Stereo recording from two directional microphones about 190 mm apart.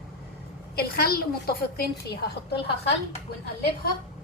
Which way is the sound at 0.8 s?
55° left (ahead or behind).